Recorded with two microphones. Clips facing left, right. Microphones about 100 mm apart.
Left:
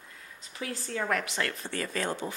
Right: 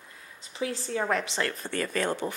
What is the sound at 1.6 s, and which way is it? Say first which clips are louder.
Speech: right 3 dB; 55° right (ahead or behind).